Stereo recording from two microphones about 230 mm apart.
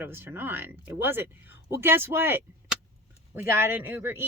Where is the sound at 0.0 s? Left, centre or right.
Centre.